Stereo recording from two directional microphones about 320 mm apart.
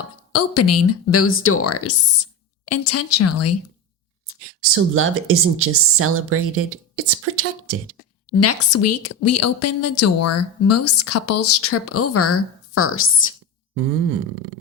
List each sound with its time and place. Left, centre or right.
0.3 s a woman's voice: left
4.7 s speech: right
8.3 s a woman's voice: left